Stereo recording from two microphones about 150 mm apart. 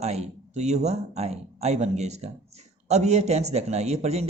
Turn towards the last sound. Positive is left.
turn(degrees=-45)  # may be behind; listen again after turning